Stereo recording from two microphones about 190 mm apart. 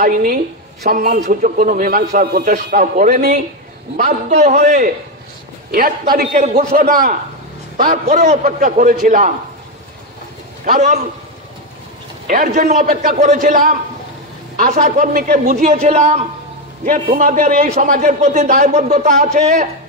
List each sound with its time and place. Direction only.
0.0 s a man's voice: 45° right (ahead or behind)
5.7 s a man's voice: 50° right (ahead or behind)
10.6 s a man's voice: 40° right (ahead or behind)
12.3 s a man's voice: 45° right (ahead or behind)